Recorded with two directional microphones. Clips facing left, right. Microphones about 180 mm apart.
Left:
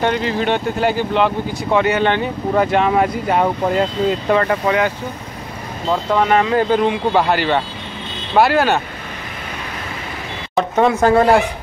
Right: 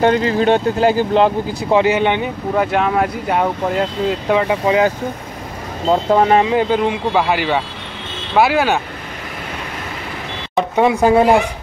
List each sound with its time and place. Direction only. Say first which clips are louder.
0.0 s speech: right 4 dB; 40° right (ahead or behind); by 2.2 s 15° right (ahead or behind)
2.5 s speech: left 1 dB; 5° right (ahead or behind)
5.9 s speech: right 3 dB; 30° right (ahead or behind)
6.4 s speech: even; 10° right (ahead or behind)
10.8 s speech: right 1 dB; 15° right (ahead or behind)